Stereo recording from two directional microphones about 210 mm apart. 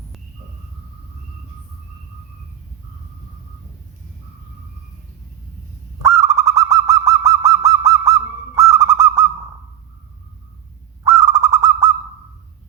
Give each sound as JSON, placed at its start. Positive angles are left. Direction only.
{"t": 6.0, "sound": "owl", "side_deg": -15}
{"t": 11.0, "sound": "owl", "side_deg": -15}